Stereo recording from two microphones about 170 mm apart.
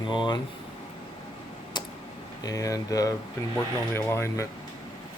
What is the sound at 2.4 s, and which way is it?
Speech, 20° left (ahead or behind).